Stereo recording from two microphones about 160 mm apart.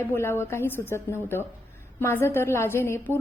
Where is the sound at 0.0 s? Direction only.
15° left (ahead or behind).